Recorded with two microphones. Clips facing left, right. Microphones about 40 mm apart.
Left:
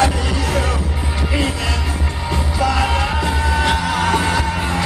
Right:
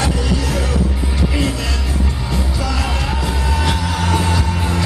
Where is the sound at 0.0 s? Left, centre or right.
Centre.